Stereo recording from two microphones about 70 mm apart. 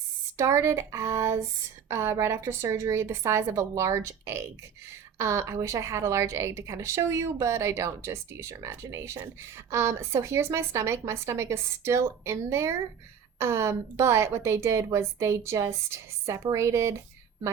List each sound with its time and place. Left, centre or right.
0.3 s a woman's voice: right